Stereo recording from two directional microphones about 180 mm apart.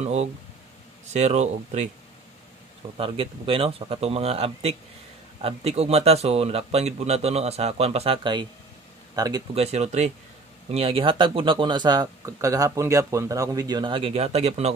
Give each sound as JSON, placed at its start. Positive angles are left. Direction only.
{"t": 0.0, "sound": "speech", "side_deg": -35}
{"t": 3.0, "sound": "speech", "side_deg": -30}
{"t": 9.6, "sound": "speech", "side_deg": -35}